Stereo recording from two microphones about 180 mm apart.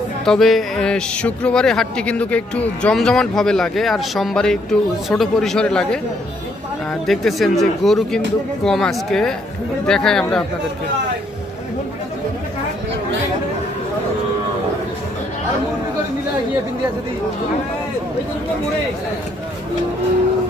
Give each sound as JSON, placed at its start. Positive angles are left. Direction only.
{"t": 0.2, "sound": "speech", "side_deg": 0}